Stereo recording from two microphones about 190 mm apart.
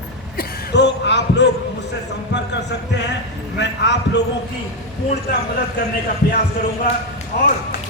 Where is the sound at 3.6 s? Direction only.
65° left (ahead or behind).